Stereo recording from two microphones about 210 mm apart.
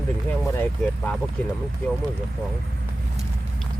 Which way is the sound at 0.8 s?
5° left (ahead or behind).